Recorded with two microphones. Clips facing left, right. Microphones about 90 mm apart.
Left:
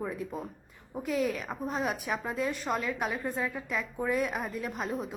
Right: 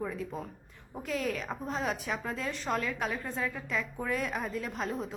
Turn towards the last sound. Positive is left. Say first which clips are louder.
# left 1 dB
turn(degrees=10)  # may be behind; listen again after turning